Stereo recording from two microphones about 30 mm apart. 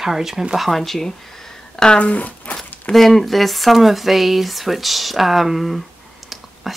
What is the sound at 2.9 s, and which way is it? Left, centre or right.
Speech, centre.